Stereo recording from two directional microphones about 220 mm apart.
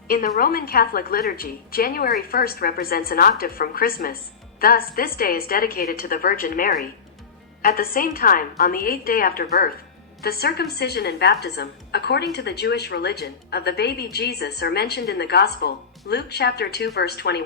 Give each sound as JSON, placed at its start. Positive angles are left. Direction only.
{"t": 0.1, "sound": "a woman's voice", "side_deg": 40}